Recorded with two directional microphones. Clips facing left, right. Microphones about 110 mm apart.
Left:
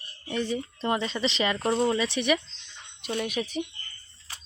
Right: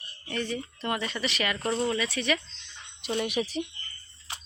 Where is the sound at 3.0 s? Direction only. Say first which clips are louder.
Right 1 dB; centre (ahead or behind).